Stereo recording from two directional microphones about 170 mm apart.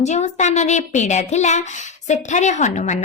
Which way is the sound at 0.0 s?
45° left (ahead or behind).